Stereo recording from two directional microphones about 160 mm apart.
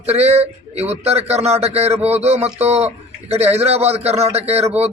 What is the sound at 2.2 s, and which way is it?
A man's voice, 40° right (ahead or behind).